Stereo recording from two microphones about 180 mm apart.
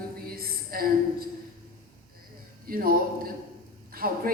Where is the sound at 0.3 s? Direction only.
55° right (ahead or behind).